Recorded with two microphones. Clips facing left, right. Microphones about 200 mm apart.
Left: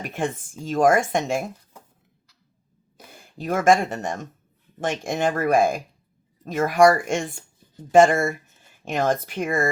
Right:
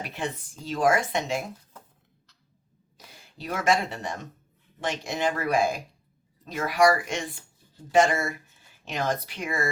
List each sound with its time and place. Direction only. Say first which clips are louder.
0.0 s speech: left 5 dB; 50° left (ahead or behind)
3.1 s speech: left 7 dB; 50° left (ahead or behind)